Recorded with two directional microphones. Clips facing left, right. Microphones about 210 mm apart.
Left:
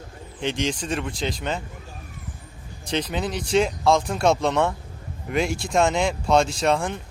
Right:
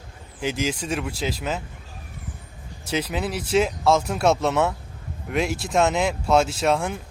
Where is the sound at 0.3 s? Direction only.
5° right (ahead or behind).